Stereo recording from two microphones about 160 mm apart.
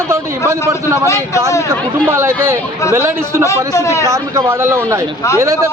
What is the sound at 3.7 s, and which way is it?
Speech, 20° left (ahead or behind).